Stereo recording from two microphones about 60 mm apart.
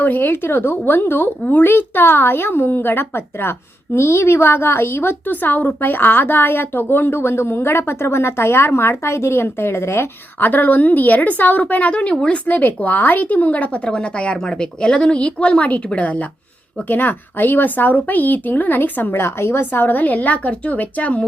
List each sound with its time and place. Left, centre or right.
0.0 s a woman's voice: left
10.4 s speech: left